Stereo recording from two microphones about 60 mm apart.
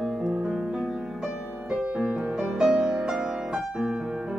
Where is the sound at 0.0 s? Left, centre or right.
Centre.